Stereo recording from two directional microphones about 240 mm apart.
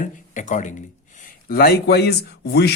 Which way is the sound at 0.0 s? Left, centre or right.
Left.